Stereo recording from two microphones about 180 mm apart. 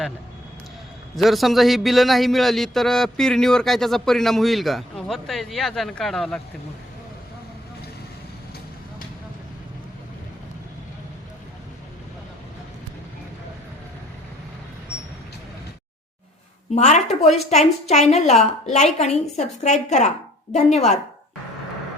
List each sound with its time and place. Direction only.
1.1 s a man's voice: centre (ahead or behind)
16.7 s a woman's voice: 40° left (ahead or behind)